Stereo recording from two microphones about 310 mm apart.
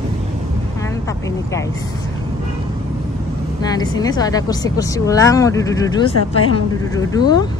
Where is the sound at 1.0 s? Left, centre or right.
Centre.